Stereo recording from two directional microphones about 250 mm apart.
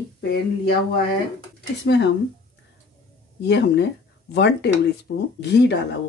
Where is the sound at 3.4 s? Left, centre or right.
Left.